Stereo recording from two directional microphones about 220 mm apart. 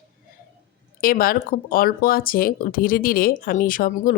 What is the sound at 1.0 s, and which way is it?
Speech, 40° left (ahead or behind).